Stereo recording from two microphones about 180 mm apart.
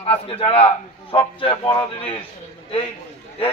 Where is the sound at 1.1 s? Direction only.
25° left (ahead or behind).